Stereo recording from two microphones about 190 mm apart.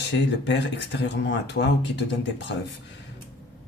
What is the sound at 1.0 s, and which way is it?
Speech, 65° left (ahead or behind).